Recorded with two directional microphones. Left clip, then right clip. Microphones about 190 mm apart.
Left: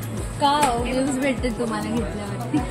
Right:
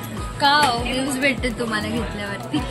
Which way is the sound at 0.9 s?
15° left (ahead or behind).